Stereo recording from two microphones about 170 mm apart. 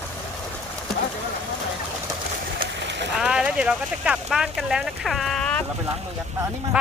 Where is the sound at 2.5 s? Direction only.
90° right.